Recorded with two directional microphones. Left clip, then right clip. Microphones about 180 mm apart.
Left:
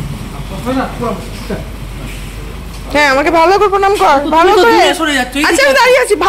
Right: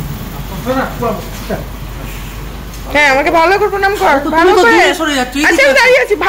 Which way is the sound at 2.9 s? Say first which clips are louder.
Even; 20° left (ahead or behind).